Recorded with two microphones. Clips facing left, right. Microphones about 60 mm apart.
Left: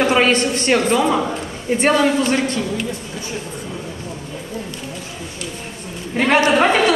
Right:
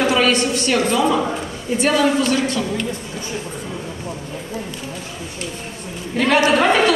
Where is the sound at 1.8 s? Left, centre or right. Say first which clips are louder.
Left 1 dB; left.